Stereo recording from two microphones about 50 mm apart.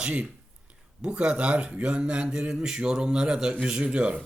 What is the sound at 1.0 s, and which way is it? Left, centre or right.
A man's voice, centre.